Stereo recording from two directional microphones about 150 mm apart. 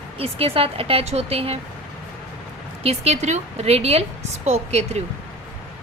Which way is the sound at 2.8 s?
45° right (ahead or behind).